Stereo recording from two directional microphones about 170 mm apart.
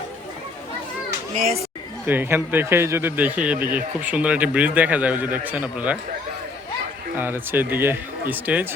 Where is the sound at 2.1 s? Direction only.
10° right (ahead or behind).